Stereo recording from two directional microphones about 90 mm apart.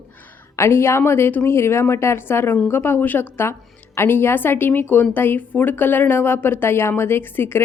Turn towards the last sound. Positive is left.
turn(degrees=25)  # may be behind; listen again after turning